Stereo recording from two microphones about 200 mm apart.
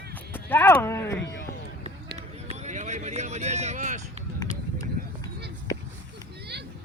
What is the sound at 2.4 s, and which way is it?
Vehicle, 35° right (ahead or behind).